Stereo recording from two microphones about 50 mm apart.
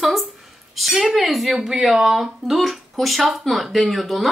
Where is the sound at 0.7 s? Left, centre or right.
Centre.